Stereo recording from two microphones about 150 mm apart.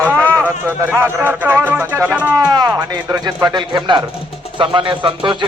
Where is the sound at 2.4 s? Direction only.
25° right (ahead or behind).